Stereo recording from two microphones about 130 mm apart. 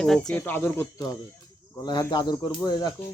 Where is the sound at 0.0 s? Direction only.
5° left (ahead or behind).